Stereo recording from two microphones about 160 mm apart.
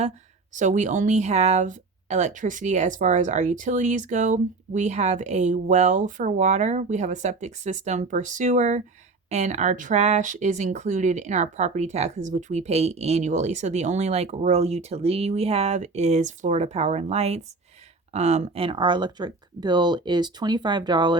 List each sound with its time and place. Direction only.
0.5 s speech: 50° right (ahead or behind); by 21.2 s 30° right (ahead or behind)